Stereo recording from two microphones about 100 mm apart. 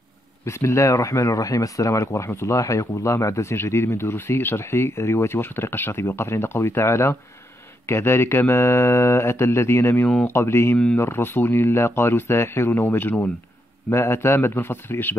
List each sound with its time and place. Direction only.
0.5 s speech: 25° left (ahead or behind)